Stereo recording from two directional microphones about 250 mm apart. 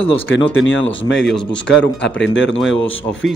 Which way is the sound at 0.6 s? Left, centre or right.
Left.